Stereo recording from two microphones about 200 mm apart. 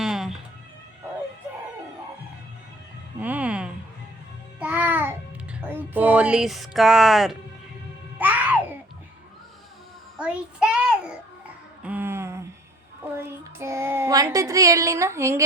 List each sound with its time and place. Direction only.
0.0 s music: centre (ahead or behind)
3.2 s music: 5° right (ahead or behind)
4.6 s babbling: 10° right (ahead or behind)
5.5 s speech: 10° right (ahead or behind)
8.2 s music: 10° right (ahead or behind)
10.2 s child singing: 5° right (ahead or behind)
11.8 s a sound: 10° right (ahead or behind)
13.1 s music: 15° right (ahead or behind)